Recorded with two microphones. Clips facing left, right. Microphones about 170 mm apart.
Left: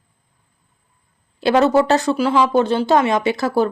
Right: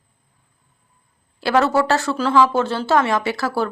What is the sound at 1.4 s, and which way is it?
Speech, 20° left (ahead or behind).